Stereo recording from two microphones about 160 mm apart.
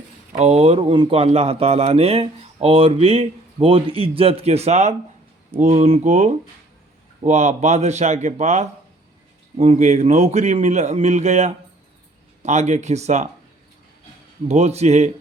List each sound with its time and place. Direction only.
0.3 s a man's voice: 40° right (ahead or behind)
14.4 s a man's voice: 40° right (ahead or behind)